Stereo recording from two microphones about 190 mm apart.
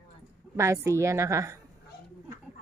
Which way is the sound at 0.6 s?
15° right (ahead or behind).